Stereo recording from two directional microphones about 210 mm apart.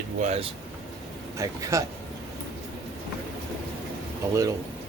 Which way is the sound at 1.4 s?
15° right (ahead or behind).